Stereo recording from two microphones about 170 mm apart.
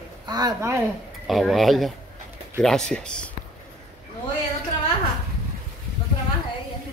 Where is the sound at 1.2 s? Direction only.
Centre (ahead or behind).